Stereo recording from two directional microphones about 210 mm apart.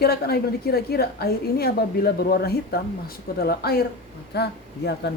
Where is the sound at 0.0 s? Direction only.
50° left (ahead or behind).